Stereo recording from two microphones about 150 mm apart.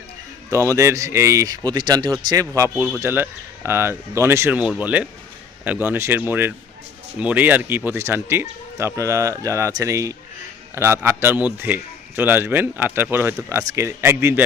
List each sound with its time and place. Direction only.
0.5 s speech: 20° right (ahead or behind)
2.6 s a man's voice: 15° right (ahead or behind)